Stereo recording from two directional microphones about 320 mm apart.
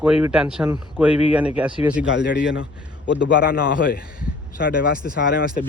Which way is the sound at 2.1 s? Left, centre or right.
Left.